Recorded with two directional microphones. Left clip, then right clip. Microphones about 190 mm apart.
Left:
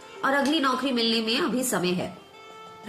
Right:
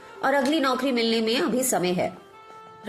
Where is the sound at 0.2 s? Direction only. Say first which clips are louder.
Right 1 dB; 15° right (ahead or behind).